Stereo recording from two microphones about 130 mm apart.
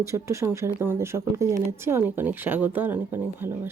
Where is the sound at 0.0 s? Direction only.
20° right (ahead or behind).